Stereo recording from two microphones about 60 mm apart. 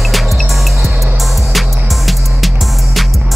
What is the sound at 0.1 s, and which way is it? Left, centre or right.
Music, centre.